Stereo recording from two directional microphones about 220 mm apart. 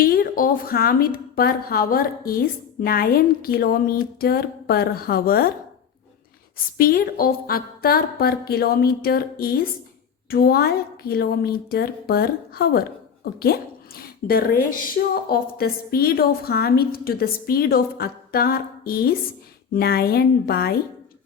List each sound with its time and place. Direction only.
0.0 s a woman's voice: 40° left (ahead or behind)
6.7 s a woman's voice: 40° left (ahead or behind)